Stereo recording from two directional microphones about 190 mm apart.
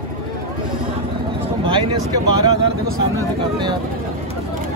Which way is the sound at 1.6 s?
25° right (ahead or behind).